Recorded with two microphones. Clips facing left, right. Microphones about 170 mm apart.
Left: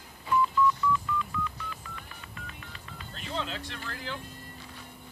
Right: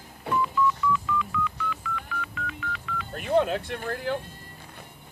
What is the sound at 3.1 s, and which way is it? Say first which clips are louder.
Music: right 13 dB; 55° right (ahead or behind).